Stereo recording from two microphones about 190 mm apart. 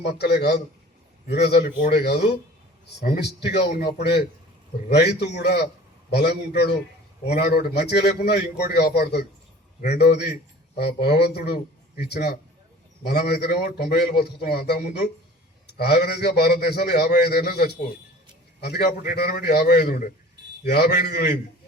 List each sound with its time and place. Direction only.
0.1 s a man's voice: 60° left (ahead or behind)
15.8 s a man's voice: 60° left (ahead or behind)
18.9 s a man's voice: 50° left (ahead or behind)